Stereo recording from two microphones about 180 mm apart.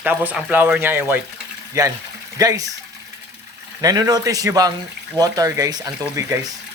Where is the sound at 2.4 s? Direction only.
20° right (ahead or behind).